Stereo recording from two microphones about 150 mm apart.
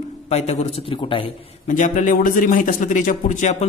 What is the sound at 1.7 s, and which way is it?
A man's voice, 55° left (ahead or behind).